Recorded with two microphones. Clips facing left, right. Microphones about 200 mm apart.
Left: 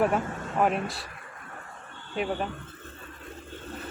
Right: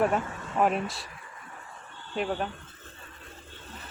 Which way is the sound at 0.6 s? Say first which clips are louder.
Even; centre (ahead or behind).